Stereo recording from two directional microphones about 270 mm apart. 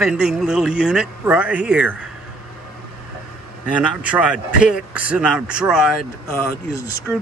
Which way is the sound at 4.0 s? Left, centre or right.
Centre.